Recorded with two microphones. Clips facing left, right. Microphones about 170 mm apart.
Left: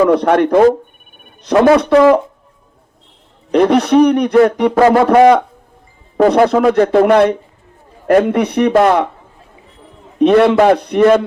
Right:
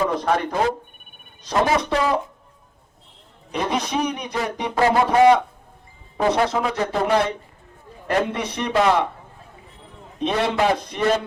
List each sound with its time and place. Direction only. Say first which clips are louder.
0.0 s speech: left 11 dB; 65° left (ahead or behind)
3.5 s speech: left 14 dB; 65° left (ahead or behind)
10.2 s speech: left 12 dB; 60° left (ahead or behind)